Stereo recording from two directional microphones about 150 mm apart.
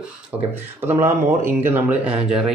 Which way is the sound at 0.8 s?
15° right (ahead or behind).